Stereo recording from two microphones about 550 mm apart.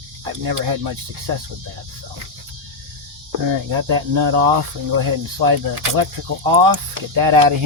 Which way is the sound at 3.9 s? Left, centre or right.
Right.